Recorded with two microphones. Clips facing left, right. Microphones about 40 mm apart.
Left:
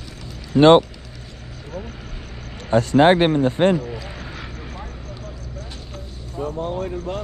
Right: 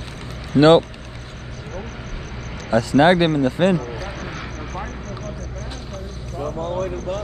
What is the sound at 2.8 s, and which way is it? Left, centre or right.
Speech, left.